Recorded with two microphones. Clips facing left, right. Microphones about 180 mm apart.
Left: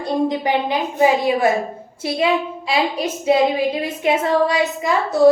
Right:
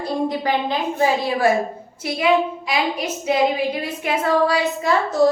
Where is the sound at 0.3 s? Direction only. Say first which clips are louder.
Left 2 dB; 15° left (ahead or behind).